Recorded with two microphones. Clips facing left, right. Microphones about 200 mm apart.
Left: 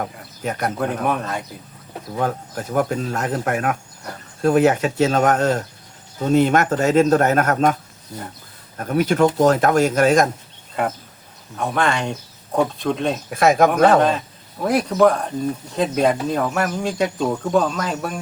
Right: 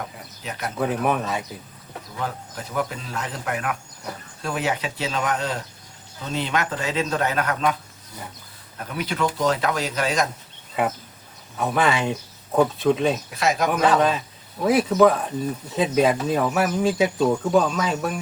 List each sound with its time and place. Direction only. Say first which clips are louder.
0.4 s speech: left 8 dB; 50° left (ahead or behind)
0.8 s speech: right 3 dB; centre (ahead or behind)
2.1 s speech: left 7 dB; 50° left (ahead or behind)
8.8 s speech: left 9 dB; 45° left (ahead or behind)
10.8 s speech: left 1 dB; 5° right (ahead or behind)
13.3 s speech: left 7 dB; 50° left (ahead or behind)
14.6 s speech: left 1 dB; centre (ahead or behind)